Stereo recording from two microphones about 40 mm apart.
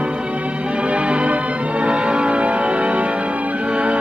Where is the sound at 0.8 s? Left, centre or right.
Right.